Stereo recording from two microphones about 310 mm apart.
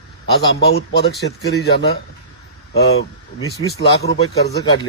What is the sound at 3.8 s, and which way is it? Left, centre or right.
Speech, left.